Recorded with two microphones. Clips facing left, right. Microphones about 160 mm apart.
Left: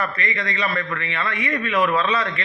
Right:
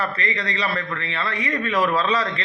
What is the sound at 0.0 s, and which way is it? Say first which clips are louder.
A man's voice: even; 35° right (ahead or behind).